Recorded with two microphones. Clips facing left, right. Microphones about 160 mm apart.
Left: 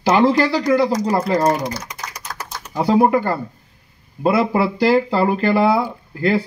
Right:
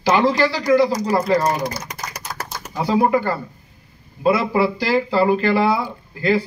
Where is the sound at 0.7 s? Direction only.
25° left (ahead or behind).